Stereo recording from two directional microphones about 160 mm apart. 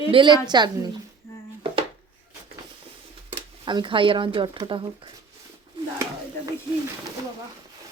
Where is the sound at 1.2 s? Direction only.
15° left (ahead or behind).